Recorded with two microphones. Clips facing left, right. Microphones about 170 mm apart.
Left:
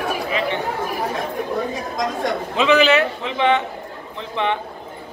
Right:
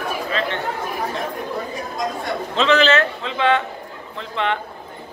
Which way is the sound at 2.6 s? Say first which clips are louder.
Left 1 dB; 10° left (ahead or behind).